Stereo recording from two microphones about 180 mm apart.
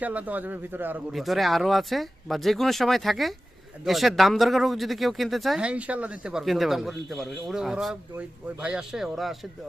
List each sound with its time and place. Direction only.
0.0 s speech: 10° right (ahead or behind)